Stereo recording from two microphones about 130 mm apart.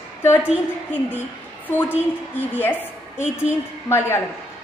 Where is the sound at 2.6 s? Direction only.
15° left (ahead or behind).